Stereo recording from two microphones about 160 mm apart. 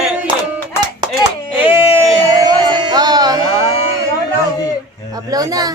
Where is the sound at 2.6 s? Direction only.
30° right (ahead or behind).